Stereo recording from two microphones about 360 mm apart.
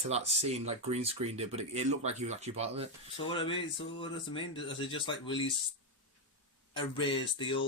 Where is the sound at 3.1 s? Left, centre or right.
Centre.